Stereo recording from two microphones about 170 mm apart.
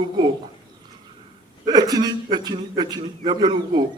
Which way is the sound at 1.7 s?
25° right (ahead or behind).